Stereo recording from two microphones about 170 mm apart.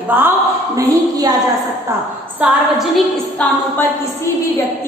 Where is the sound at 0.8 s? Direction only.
20° right (ahead or behind).